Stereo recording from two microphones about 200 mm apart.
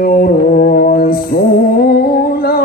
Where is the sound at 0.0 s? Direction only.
45° left (ahead or behind).